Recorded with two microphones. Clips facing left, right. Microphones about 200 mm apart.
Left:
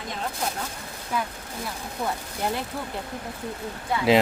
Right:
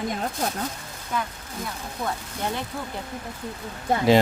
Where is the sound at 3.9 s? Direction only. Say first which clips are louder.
Right 4 dB; 45° right (ahead or behind).